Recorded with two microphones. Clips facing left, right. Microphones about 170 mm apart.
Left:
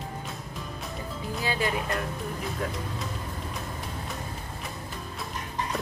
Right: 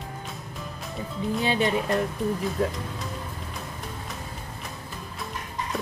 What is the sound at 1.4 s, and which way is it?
Speech, 25° right (ahead or behind).